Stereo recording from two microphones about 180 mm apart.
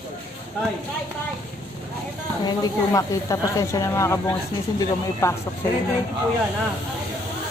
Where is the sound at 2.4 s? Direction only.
20° left (ahead or behind).